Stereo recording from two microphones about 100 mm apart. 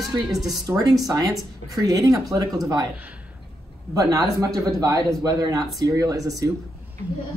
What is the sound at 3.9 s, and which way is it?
Speech, 35° right (ahead or behind).